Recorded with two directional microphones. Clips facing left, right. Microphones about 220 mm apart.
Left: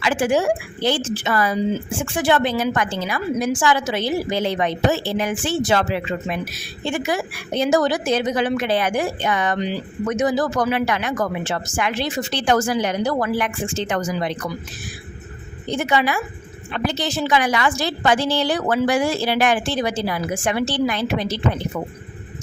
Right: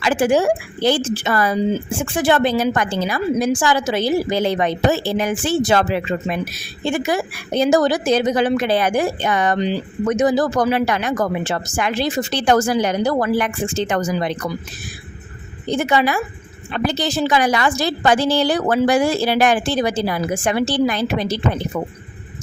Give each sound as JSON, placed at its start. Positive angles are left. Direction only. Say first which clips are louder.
{"t": 0.0, "sound": "a woman's voice", "louder": "right 3 dB", "side_deg": -40}
{"t": 15.7, "sound": "a woman's voice", "louder": "right 3 dB", "side_deg": -40}